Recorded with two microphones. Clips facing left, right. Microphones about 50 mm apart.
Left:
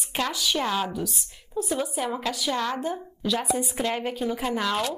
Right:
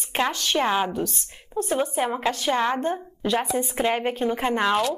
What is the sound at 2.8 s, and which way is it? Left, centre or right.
Speech, right.